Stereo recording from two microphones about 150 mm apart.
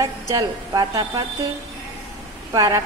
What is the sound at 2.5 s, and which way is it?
Speech, 25° right (ahead or behind).